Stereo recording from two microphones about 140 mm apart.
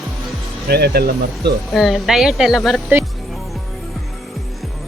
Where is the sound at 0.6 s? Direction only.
90° right.